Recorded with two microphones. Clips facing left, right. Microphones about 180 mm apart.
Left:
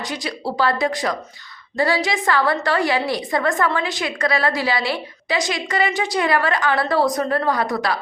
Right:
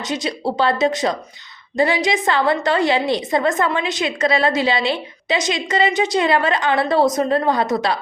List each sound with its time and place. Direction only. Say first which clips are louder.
0.0 s a woman's voice: right 4 dB; 20° right (ahead or behind)